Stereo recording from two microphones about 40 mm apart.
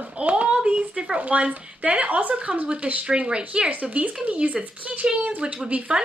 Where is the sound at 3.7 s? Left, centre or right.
Right.